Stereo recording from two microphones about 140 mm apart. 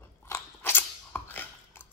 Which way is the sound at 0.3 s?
15° left (ahead or behind).